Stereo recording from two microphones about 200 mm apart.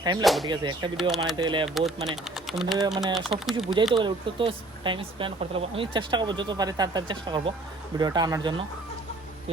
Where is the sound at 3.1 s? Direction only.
Centre (ahead or behind).